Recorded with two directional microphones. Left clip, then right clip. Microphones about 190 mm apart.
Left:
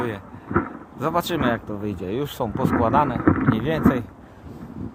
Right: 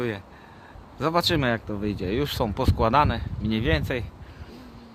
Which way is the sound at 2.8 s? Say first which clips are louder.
Even; 45° right (ahead or behind).